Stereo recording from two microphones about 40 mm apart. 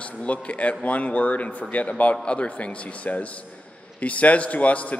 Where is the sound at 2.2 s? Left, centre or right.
Left.